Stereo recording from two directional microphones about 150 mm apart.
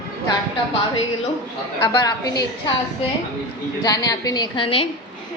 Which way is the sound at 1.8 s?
30° left (ahead or behind).